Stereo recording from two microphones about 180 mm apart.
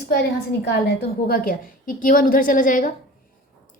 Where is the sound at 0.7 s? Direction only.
60° left (ahead or behind).